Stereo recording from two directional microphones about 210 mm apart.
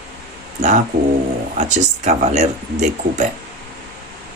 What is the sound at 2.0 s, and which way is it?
Speech, 35° right (ahead or behind).